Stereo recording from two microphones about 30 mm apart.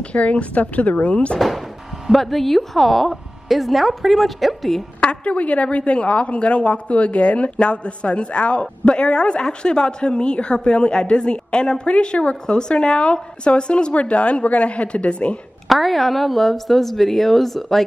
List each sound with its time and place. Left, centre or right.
0.0 s speech: left
2.1 s a woman's voice: centre
5.0 s a woman's voice: left
13.9 s speech: left
15.7 s a woman's voice: centre